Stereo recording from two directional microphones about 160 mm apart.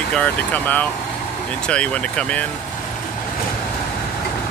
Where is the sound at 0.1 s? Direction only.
10° left (ahead or behind).